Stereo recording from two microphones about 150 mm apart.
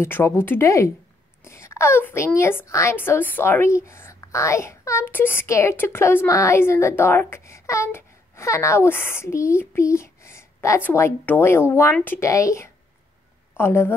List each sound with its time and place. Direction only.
0.0 s a woman's voice: 15° left (ahead or behind)